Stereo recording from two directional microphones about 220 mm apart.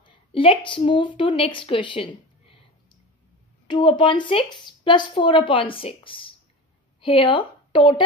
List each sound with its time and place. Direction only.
0.0 s a woman's voice: 25° left (ahead or behind)